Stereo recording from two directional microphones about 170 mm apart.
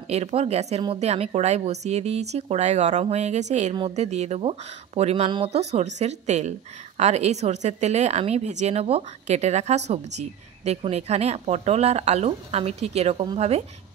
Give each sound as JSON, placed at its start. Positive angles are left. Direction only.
{"t": 0.1, "sound": "a woman's voice", "side_deg": -35}